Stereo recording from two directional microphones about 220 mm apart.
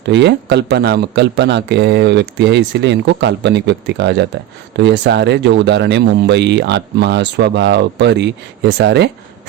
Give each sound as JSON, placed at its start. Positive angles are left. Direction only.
{"t": 0.1, "sound": "a man's voice", "side_deg": -50}